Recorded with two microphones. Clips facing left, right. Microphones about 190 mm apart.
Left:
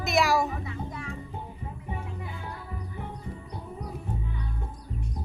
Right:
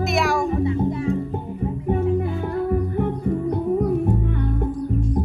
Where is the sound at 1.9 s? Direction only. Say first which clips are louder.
Right 18 dB; 55° right (ahead or behind).